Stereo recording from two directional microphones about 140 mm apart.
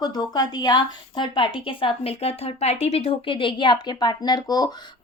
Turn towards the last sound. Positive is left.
turn(degrees=30)  # may be behind; listen again after turning